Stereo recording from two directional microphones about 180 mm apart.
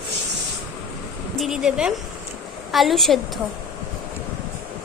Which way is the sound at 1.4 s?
5° right (ahead or behind).